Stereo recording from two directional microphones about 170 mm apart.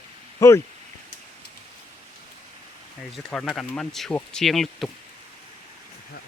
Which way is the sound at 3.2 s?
5° left (ahead or behind).